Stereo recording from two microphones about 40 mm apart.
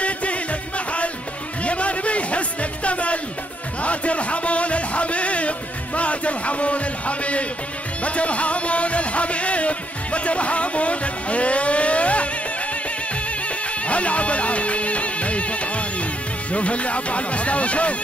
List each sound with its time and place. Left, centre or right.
0.0 s music: left
13.8 s music: left